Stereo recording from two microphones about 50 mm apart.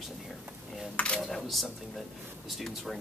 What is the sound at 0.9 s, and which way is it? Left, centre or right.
Speech, left.